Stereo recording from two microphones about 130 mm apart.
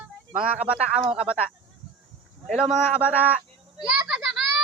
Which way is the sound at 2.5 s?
5° right (ahead or behind).